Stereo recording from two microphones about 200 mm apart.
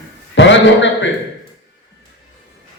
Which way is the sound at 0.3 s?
65° left (ahead or behind).